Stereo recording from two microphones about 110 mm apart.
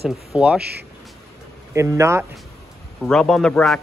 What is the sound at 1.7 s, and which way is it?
Speech, 25° right (ahead or behind).